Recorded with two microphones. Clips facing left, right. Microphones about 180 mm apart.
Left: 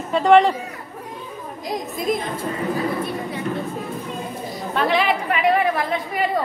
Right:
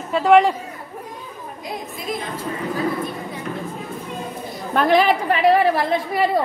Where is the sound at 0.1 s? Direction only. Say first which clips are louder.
Even; 5° right (ahead or behind).